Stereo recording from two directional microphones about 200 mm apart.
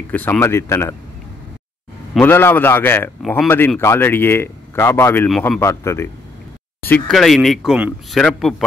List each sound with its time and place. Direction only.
0.1 s a man's voice: 10° left (ahead or behind)
2.1 s a man's voice: 10° left (ahead or behind)